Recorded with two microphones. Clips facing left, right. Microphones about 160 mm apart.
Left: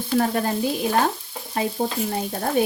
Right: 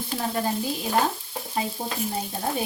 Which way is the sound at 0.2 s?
70° left (ahead or behind).